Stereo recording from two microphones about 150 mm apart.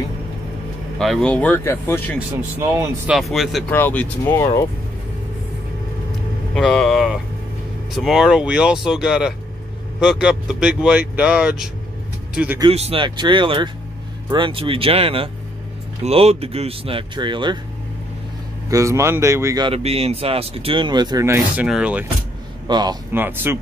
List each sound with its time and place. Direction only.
0.9 s speech: centre (ahead or behind)
2.1 s speech: 15° right (ahead or behind)
3.2 s speech: centre (ahead or behind)
3.7 s speech: 10° left (ahead or behind)
6.5 s speech: 5° left (ahead or behind)
12.7 s speech: 40° right (ahead or behind)
18.7 s speech: 20° right (ahead or behind)
19.7 s speech: 40° right (ahead or behind); by 21.4 s 25° right (ahead or behind)
21.5 s speech: 5° right (ahead or behind)
22.7 s speech: 30° right (ahead or behind)
23.1 s speech: 15° right (ahead or behind)